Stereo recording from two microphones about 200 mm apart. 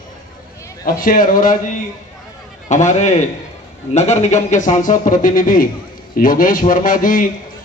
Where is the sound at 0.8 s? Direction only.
45° left (ahead or behind).